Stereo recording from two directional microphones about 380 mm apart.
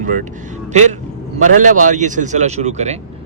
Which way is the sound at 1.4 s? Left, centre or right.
Centre.